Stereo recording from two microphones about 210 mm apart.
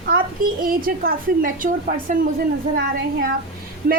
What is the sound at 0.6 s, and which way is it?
A woman's voice, 40° right (ahead or behind).